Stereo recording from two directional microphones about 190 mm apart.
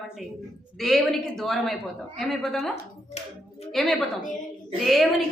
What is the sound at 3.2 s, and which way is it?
Speech, 35° left (ahead or behind).